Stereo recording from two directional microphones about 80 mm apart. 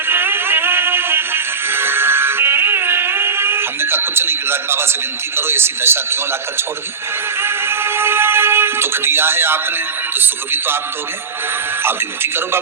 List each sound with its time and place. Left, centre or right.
0.1 s music: right
5.4 s speech: right
7.4 s speech: right
11.8 s speech: right